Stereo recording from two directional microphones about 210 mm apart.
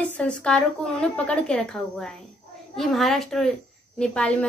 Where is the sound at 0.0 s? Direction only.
5° left (ahead or behind).